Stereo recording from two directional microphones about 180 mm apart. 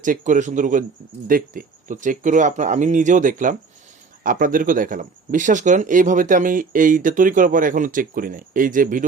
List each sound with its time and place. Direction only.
0.0 s speech: 45° right (ahead or behind)